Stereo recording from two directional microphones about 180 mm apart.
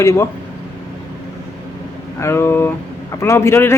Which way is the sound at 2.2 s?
15° left (ahead or behind).